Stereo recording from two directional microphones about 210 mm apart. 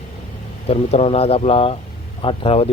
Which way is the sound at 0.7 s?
30° left (ahead or behind).